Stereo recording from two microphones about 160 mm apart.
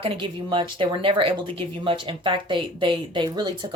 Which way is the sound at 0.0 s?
35° right (ahead or behind).